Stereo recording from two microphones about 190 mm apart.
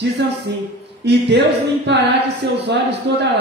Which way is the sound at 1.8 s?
65° right (ahead or behind).